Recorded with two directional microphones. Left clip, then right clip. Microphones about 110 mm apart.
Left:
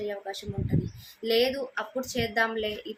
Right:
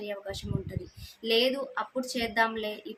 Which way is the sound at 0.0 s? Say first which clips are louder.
Left 3 dB; 25° right (ahead or behind).